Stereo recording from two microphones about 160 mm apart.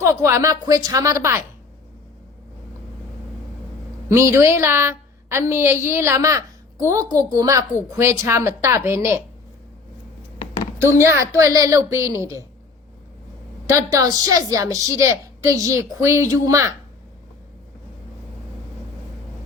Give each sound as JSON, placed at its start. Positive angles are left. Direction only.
{"t": 0.0, "sound": "a woman's voice", "side_deg": -15}
{"t": 4.1, "sound": "a woman's voice", "side_deg": -20}
{"t": 10.3, "sound": "a sound", "side_deg": 35}
{"t": 10.8, "sound": "a woman's voice", "side_deg": -15}
{"t": 13.7, "sound": "a woman's voice", "side_deg": -20}